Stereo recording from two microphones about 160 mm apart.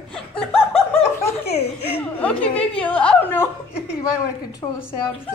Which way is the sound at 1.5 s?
40° left (ahead or behind).